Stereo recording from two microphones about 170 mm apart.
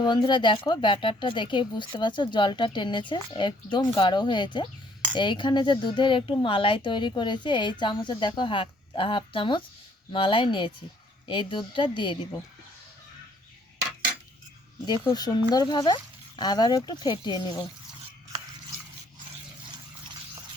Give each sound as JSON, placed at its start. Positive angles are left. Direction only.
{"t": 0.0, "sound": "speech", "side_deg": 25}
{"t": 14.8, "sound": "speech", "side_deg": 25}